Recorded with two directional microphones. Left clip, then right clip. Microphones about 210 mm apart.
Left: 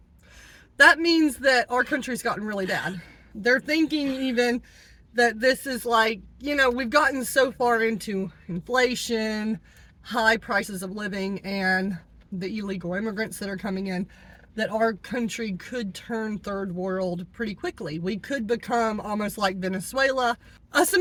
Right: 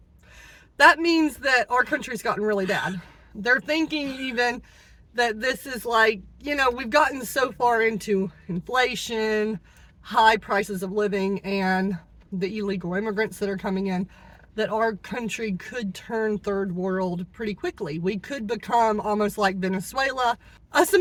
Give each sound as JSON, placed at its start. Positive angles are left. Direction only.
{"t": 0.8, "sound": "speech", "side_deg": 15}